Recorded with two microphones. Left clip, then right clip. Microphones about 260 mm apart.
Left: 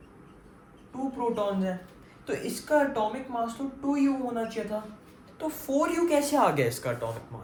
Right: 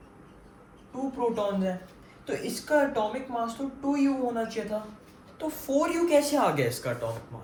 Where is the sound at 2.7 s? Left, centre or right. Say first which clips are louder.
Even; centre.